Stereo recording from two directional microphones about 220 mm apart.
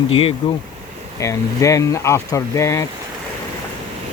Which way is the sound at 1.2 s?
15° left (ahead or behind).